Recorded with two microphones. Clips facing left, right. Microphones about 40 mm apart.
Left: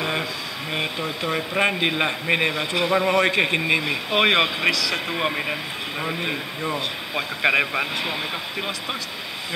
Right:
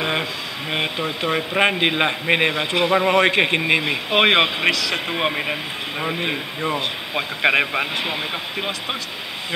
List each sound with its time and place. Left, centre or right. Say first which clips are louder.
0.0 s a sound: right 2 dB; centre
1.6 s a man's voice: right 3 dB; right
5.3 s speech: right 2 dB; centre